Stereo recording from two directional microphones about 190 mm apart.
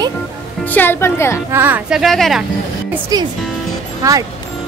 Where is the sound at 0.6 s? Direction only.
10° left (ahead or behind).